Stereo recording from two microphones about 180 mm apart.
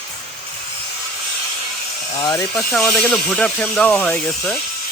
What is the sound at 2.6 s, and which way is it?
Speech, 5° left (ahead or behind).